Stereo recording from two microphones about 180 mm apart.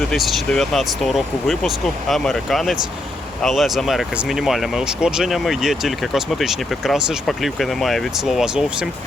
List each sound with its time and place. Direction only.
0.0 s speech: centre (ahead or behind)